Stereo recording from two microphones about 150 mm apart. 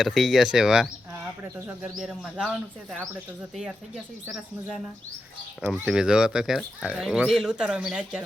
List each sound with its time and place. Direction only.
0.0 s speech: centre (ahead or behind)
3.5 s speech: centre (ahead or behind)
5.8 s speech: 5° right (ahead or behind)